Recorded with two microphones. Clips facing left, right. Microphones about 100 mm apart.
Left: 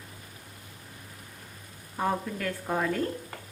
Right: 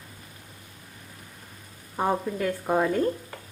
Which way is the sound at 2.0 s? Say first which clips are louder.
Right 4 dB; 20° right (ahead or behind).